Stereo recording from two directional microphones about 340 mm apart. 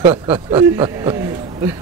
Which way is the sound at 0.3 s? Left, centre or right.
Centre.